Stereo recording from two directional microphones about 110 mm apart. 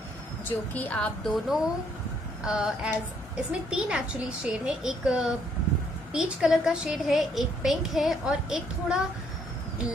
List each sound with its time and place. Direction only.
0.5 s a woman's voice: 15° left (ahead or behind); by 9.0 s 5° right (ahead or behind)